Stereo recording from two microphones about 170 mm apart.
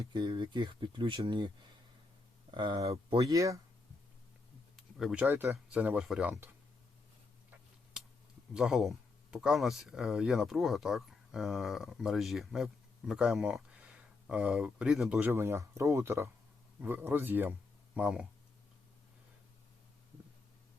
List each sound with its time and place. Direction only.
0.1 s speech: 25° right (ahead or behind)
2.5 s speech: 25° right (ahead or behind)
3.2 s speech: 20° right (ahead or behind)
4.8 s a sound: centre (ahead or behind)
5.2 s speech: 15° right (ahead or behind)
8.5 s speech: centre (ahead or behind)
15.3 s speech: 15° right (ahead or behind)